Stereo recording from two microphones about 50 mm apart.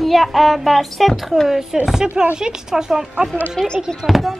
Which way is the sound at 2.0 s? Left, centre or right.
Centre.